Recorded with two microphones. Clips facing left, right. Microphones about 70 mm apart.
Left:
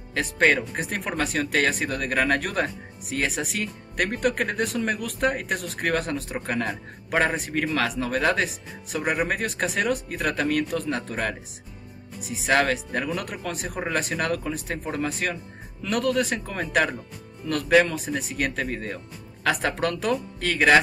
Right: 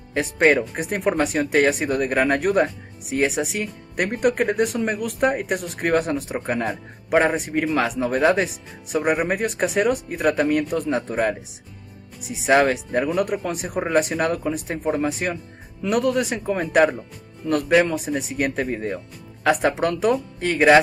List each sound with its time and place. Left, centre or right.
0.1 s speech: centre
12.4 s speech: centre